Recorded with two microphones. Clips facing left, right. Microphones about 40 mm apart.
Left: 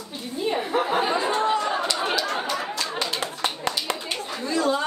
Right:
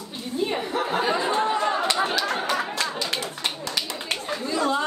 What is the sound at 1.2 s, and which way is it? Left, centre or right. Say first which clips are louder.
Chatter: even; right.